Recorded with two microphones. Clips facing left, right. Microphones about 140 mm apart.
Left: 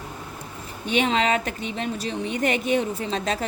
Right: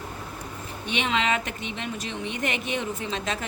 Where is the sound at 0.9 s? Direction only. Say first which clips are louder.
Left 4 dB; 40° left (ahead or behind).